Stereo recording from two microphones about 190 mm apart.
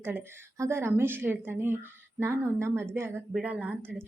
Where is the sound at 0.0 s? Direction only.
10° right (ahead or behind).